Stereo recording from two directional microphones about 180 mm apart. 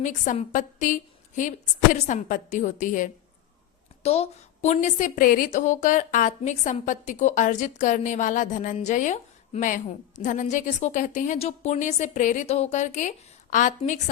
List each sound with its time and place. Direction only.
0.0 s a woman's voice: 45° left (ahead or behind)